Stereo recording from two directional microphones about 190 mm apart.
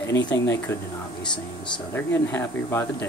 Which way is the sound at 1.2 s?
25° left (ahead or behind).